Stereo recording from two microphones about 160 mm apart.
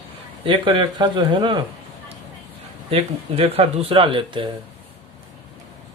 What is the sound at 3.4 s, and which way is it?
Speech, 35° right (ahead or behind).